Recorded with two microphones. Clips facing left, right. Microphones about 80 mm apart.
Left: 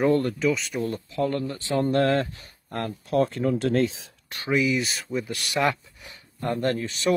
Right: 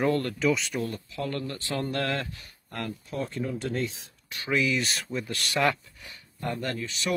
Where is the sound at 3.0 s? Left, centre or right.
Left.